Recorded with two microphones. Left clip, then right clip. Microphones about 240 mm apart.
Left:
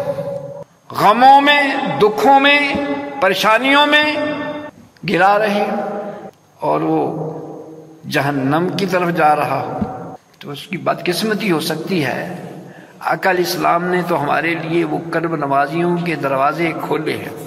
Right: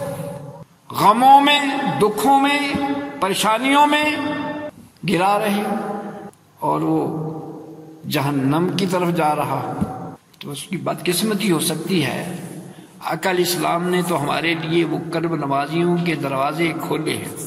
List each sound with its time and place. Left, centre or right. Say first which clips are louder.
0.9 s a man's voice: left 3 dB; right
8.1 s a man's voice: left 4 dB; right